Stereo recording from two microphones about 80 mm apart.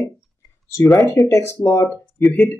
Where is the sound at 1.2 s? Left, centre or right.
Left.